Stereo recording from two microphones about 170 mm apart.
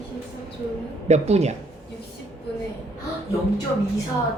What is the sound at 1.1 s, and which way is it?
Speech, 40° right (ahead or behind).